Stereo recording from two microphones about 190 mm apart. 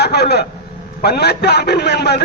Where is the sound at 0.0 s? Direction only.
60° left (ahead or behind).